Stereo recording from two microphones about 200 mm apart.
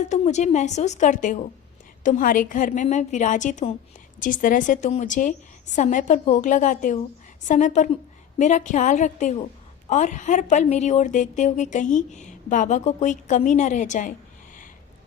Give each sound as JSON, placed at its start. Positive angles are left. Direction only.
{"t": 0.1, "sound": "a woman's voice", "side_deg": 35}